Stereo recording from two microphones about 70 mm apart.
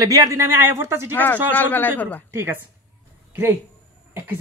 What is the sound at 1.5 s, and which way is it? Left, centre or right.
Speech, left.